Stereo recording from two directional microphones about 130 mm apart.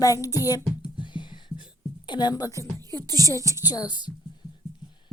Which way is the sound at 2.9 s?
30° right (ahead or behind).